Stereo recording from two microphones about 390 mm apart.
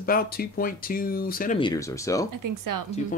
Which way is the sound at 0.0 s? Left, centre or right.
Left.